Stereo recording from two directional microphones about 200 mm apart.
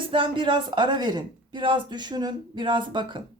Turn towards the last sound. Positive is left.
turn(degrees=-25)  # may be behind; listen again after turning